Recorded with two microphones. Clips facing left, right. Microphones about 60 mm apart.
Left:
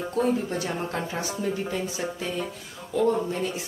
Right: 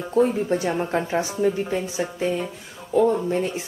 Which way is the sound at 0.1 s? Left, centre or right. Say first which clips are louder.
Right 6 dB; right.